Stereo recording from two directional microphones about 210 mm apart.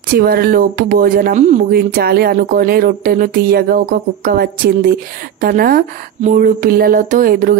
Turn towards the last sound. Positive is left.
turn(degrees=-40)  # may be behind; listen again after turning